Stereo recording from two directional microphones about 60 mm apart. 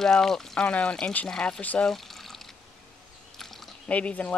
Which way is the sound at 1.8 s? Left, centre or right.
Centre.